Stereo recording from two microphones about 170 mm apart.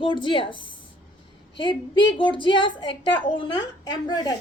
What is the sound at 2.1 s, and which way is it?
A woman's voice, 30° left (ahead or behind).